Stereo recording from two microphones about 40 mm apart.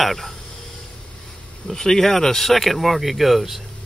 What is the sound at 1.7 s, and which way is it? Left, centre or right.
Speech, centre.